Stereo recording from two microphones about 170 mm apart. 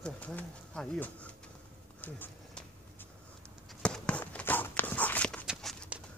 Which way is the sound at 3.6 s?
5° left (ahead or behind).